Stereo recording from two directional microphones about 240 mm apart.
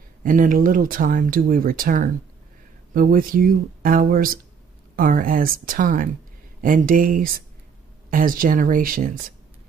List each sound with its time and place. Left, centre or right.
0.2 s speech: right